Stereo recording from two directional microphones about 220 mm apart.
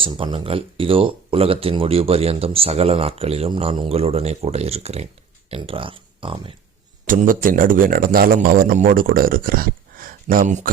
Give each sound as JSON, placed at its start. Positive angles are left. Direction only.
{"t": 0.0, "sound": "speech", "side_deg": -20}
{"t": 7.1, "sound": "a man's voice", "side_deg": -40}